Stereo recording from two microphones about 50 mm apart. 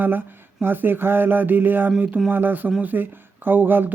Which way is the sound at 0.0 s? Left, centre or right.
Right.